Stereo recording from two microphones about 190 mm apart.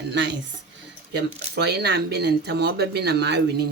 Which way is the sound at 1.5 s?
60° right (ahead or behind).